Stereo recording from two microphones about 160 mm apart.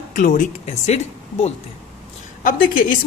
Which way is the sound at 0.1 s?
55° left (ahead or behind).